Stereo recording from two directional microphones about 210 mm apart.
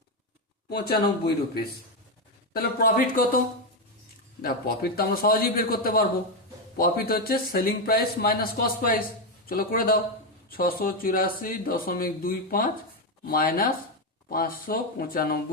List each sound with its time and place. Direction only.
0.7 s a man's voice: 45° left (ahead or behind)